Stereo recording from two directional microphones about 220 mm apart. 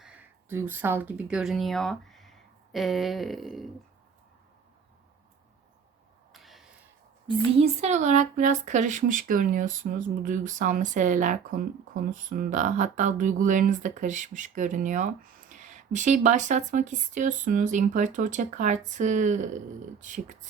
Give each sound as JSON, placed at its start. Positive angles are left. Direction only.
{"t": 0.0, "sound": "speech", "side_deg": -5}
{"t": 6.3, "sound": "a sound", "side_deg": 0}
{"t": 7.3, "sound": "speech", "side_deg": -30}